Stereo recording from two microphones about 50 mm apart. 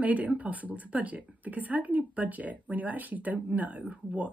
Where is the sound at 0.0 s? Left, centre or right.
Right.